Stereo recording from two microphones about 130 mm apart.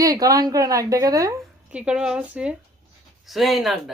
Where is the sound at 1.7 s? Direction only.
10° right (ahead or behind).